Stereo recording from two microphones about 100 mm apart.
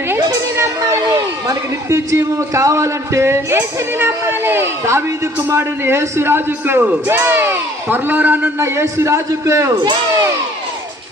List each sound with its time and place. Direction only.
0.5 s speech: 30° right (ahead or behind)